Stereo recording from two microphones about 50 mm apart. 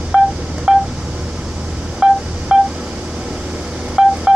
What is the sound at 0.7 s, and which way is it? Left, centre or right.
Telephone dialing, right.